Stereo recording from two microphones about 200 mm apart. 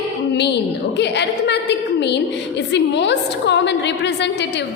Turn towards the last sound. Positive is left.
turn(degrees=60)  # may be behind; listen again after turning